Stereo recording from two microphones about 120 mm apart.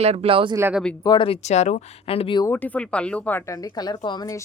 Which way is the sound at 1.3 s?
70° left (ahead or behind).